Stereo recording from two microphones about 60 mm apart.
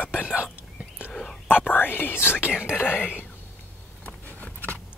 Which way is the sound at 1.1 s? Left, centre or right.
Centre.